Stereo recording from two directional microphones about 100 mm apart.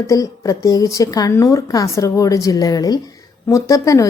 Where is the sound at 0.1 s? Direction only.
35° left (ahead or behind).